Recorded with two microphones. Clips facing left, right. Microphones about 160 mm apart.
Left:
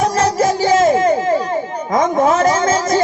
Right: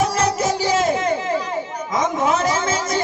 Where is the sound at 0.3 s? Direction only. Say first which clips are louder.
Left 6 dB; 45° left (ahead or behind).